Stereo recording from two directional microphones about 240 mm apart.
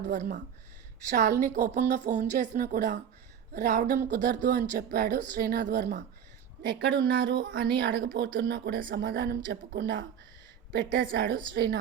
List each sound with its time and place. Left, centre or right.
0.1 s speech: right
1.4 s speech: right